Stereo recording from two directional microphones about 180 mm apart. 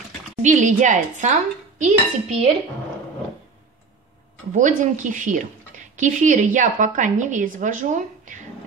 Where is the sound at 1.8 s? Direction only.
40° right (ahead or behind).